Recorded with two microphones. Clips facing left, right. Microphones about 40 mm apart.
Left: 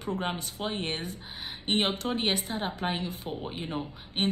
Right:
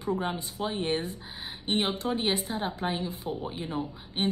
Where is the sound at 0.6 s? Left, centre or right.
Left.